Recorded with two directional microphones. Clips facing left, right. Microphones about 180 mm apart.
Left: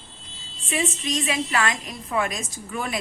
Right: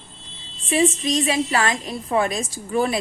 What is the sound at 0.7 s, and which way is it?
A woman's voice, 30° right (ahead or behind).